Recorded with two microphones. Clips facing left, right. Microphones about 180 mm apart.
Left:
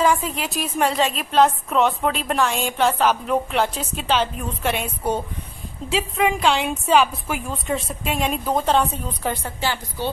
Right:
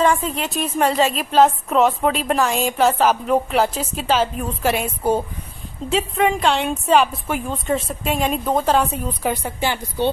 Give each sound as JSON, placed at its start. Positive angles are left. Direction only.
{"t": 0.0, "sound": "a woman's voice", "side_deg": 0}
{"t": 5.9, "sound": "a woman's voice", "side_deg": 0}
{"t": 9.2, "sound": "a woman's voice", "side_deg": -15}